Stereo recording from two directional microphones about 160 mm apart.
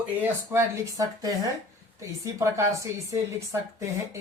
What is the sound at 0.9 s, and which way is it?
Speech, 20° right (ahead or behind).